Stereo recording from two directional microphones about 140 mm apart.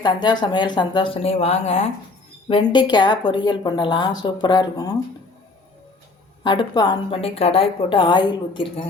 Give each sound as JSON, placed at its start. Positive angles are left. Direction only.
{"t": 0.0, "sound": "a woman's voice", "side_deg": 30}
{"t": 2.5, "sound": "a woman's voice", "side_deg": 35}
{"t": 6.4, "sound": "a woman's voice", "side_deg": 30}